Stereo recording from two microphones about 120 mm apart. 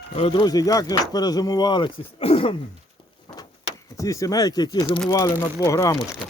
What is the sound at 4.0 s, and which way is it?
Speech, 25° left (ahead or behind).